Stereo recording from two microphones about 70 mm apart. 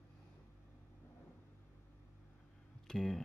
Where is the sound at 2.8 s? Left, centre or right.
Centre.